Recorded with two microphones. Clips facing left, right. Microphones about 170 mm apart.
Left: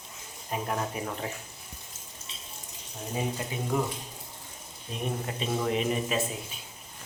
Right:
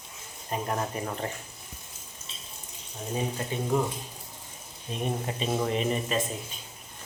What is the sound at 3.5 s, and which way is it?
Speech, 10° left (ahead or behind).